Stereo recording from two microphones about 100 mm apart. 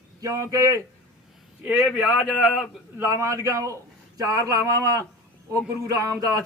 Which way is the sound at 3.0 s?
30° right (ahead or behind).